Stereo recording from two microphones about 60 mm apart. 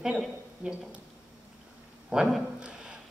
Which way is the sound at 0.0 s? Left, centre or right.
Centre.